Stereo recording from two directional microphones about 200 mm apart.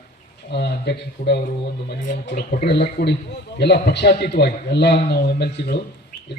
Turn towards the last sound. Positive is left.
turn(degrees=55)  # may be behind; listen again after turning